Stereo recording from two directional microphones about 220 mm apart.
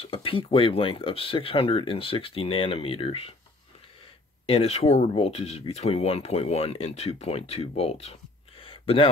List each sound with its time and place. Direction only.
0.0 s speech: 25° left (ahead or behind)
4.5 s speech: 30° left (ahead or behind)